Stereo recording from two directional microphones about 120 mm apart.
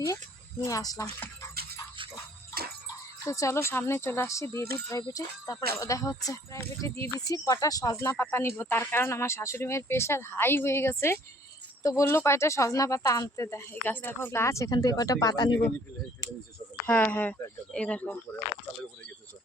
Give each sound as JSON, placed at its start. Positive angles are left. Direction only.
{"t": 0.6, "sound": "speech", "side_deg": 30}
{"t": 3.2, "sound": "speech", "side_deg": 25}
{"t": 16.8, "sound": "speech", "side_deg": 15}